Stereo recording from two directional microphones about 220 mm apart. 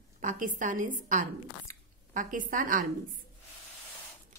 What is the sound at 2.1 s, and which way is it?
Speech, 35° right (ahead or behind).